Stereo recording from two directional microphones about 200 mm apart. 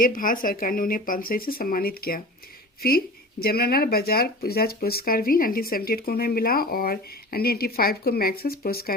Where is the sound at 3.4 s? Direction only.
50° left (ahead or behind).